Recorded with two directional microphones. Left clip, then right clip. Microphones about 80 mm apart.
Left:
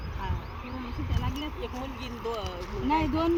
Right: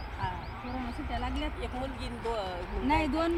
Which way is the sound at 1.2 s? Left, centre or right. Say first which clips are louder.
Left 2 dB; right.